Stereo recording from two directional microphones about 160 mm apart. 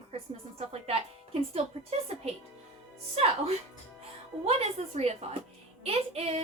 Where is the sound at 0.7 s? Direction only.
40° right (ahead or behind).